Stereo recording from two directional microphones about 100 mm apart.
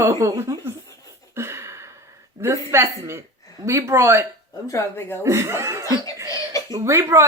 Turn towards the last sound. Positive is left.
turn(degrees=-30)  # may be behind; listen again after turning